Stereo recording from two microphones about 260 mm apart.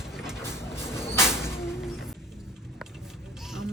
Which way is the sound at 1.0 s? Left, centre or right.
Centre.